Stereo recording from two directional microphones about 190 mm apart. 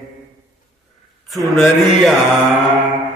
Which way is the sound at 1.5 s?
Centre (ahead or behind).